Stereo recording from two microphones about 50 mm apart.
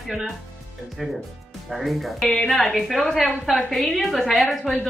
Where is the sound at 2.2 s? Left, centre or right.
Centre.